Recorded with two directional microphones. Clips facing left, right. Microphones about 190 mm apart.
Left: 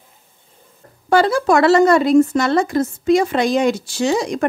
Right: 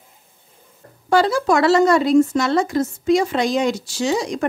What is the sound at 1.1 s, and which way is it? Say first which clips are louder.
A woman's voice: left 2 dB; 55° left (ahead or behind).